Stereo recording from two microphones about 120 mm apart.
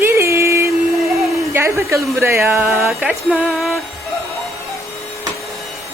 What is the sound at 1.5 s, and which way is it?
A woman's voice, 25° right (ahead or behind).